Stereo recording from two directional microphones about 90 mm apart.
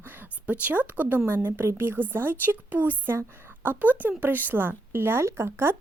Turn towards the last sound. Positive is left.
turn(degrees=-25)  # may be behind; listen again after turning